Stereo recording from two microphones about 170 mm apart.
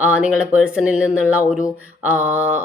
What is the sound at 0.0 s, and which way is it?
Speech, 10° right (ahead or behind).